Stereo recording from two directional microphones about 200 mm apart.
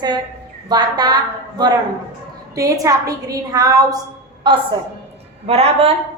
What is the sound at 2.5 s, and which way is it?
A woman's voice, 15° right (ahead or behind).